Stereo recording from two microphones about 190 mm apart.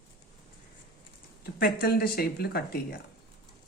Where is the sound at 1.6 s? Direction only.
55° left (ahead or behind).